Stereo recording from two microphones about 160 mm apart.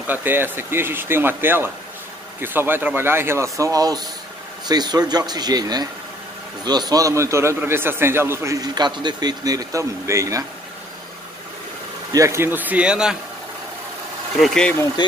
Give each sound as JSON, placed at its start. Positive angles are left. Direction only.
{"t": 0.0, "sound": "a man's voice", "side_deg": -10}
{"t": 12.1, "sound": "speech", "side_deg": -20}
{"t": 14.4, "sound": "speech", "side_deg": 5}
{"t": 15.0, "sound": "speech", "side_deg": 25}